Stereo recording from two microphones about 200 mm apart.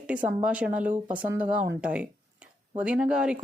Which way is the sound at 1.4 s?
5° right (ahead or behind).